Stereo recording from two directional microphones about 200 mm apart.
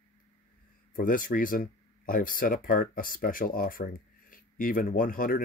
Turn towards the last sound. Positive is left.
turn(degrees=45)  # may be behind; listen again after turning